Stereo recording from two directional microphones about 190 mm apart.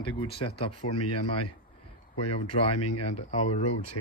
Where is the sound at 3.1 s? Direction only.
35° left (ahead or behind).